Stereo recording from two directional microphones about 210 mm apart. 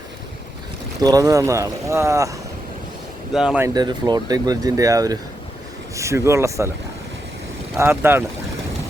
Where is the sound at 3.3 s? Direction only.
5° right (ahead or behind).